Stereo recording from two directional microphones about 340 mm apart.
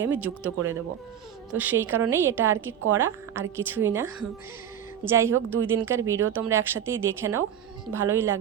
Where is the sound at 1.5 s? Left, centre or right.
Centre.